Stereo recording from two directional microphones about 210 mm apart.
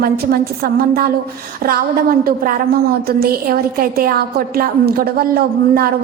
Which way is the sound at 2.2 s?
45° right (ahead or behind).